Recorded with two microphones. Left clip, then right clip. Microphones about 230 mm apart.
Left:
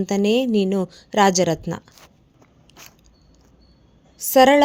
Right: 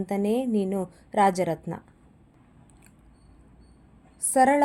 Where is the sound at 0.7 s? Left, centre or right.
Left.